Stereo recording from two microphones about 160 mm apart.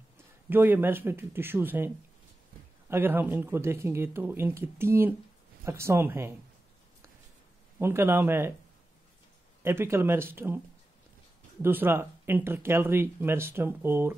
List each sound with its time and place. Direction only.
0.5 s speech: 15° right (ahead or behind)
2.9 s speech: 15° right (ahead or behind)
7.8 s speech: 15° right (ahead or behind)
9.6 s speech: 15° right (ahead or behind)
11.6 s speech: 15° right (ahead or behind)